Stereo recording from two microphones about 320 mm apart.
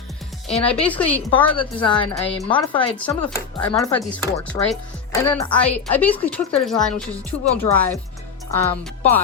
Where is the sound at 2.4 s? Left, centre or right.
Centre.